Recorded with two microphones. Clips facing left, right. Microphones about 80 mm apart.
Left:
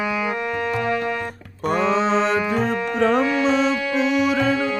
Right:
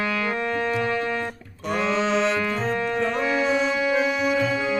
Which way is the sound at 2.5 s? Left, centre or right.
Left.